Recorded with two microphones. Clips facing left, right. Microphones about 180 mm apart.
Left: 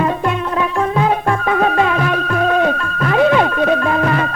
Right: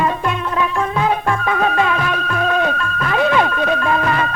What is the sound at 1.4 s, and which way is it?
Music, 40° left (ahead or behind).